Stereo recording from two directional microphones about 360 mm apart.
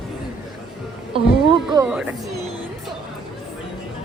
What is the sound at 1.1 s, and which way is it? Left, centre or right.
A woman's voice, centre.